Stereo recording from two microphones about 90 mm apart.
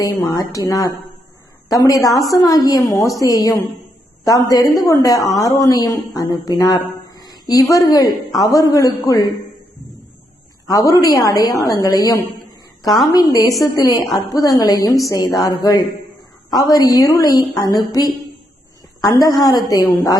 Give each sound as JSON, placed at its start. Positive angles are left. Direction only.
{"t": 0.0, "sound": "a woman's voice", "side_deg": 40}
{"t": 10.7, "sound": "a woman's voice", "side_deg": 45}